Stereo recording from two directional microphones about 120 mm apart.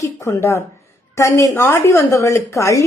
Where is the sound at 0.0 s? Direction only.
25° left (ahead or behind).